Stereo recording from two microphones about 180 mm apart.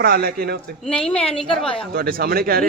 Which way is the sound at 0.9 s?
5° left (ahead or behind).